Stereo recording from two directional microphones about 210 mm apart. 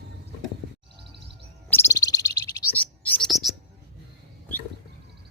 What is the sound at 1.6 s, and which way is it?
Bird, 10° left (ahead or behind).